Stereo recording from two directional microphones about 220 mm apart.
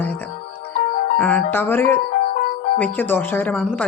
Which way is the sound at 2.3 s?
35° left (ahead or behind).